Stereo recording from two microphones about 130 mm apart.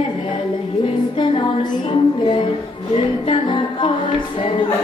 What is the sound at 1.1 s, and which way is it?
Music, 35° left (ahead or behind).